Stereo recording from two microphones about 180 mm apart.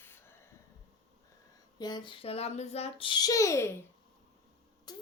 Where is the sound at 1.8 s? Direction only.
25° left (ahead or behind).